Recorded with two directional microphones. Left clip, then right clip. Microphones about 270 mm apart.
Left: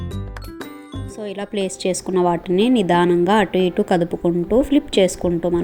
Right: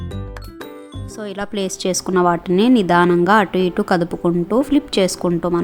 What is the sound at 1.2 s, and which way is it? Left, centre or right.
A woman's voice, centre.